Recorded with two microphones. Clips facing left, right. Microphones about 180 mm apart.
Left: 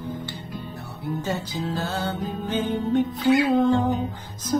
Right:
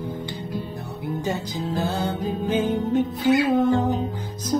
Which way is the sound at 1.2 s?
10° right (ahead or behind).